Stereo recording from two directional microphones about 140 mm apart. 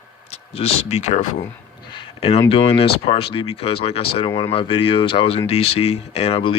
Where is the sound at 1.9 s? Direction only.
40° left (ahead or behind).